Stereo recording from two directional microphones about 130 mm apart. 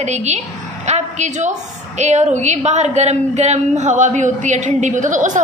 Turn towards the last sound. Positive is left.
turn(degrees=-75)  # may be behind; listen again after turning